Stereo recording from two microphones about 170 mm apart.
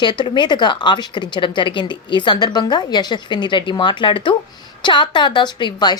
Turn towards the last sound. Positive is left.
turn(degrees=25)  # may be behind; listen again after turning